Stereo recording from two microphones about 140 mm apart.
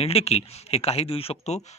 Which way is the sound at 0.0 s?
45° left (ahead or behind).